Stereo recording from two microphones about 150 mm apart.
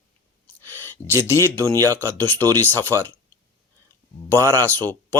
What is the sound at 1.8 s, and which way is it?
Speech, 10° left (ahead or behind).